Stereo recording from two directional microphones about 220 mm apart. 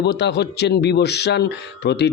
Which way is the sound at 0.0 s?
50° left (ahead or behind).